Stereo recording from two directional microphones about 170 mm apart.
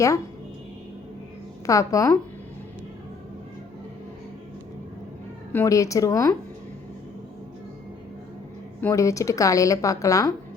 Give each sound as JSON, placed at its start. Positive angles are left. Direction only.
{"t": 1.6, "sound": "a woman's voice", "side_deg": 20}
{"t": 5.5, "sound": "a woman's voice", "side_deg": 15}
{"t": 8.8, "sound": "a woman's voice", "side_deg": 20}